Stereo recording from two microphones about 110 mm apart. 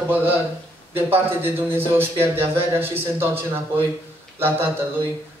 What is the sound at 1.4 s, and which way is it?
Speech, 20° right (ahead or behind).